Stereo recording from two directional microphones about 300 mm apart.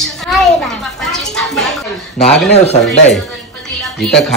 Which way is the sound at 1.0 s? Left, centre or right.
Centre.